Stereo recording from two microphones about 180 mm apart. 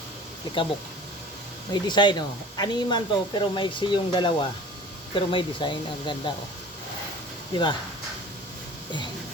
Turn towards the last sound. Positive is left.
turn(degrees=25)  # may be behind; listen again after turning